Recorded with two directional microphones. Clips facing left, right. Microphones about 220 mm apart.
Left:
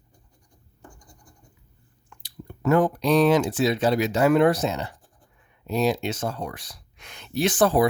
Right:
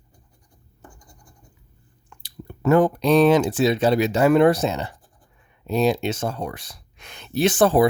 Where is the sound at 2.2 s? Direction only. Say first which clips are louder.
Right 3 dB; 25° right (ahead or behind).